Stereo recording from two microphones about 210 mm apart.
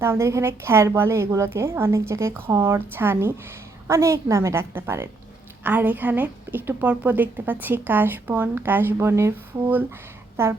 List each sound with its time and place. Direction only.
0.0 s a woman's voice: 15° right (ahead or behind)